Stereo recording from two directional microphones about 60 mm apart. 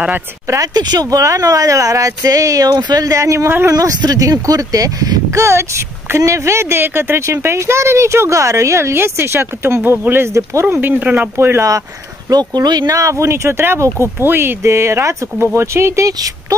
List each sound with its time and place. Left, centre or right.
0.6 s speech: right
3.4 s speech: right
3.7 s speech: right
5.4 s speech: right
9.8 s speech: right
10.3 s speech: right
11.0 s speech: right
11.3 s speech: right
12.3 s speech: right
13.3 s speech: right
16.1 s speech: right